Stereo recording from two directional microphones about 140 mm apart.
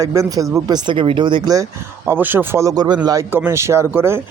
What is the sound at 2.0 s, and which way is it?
A man's voice, 15° right (ahead or behind).